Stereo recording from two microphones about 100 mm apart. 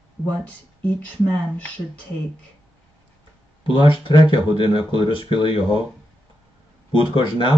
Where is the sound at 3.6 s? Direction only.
55° left (ahead or behind).